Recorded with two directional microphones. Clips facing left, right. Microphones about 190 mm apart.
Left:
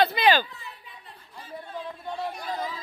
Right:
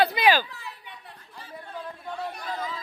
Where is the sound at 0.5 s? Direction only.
75° right (ahead or behind).